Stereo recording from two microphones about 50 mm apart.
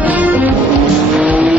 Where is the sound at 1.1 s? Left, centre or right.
Right.